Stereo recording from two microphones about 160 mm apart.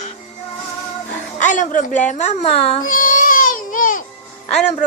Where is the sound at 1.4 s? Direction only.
50° left (ahead or behind).